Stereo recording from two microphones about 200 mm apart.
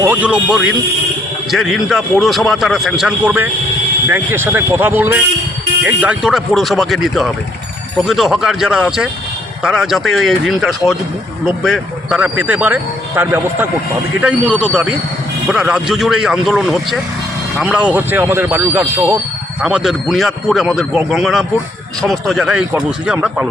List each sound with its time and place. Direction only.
0.0 s speech: 10° right (ahead or behind)
1.5 s a man's voice: centre (ahead or behind)